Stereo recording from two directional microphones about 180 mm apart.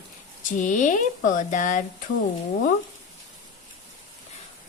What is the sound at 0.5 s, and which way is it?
A woman's voice, 45° left (ahead or behind).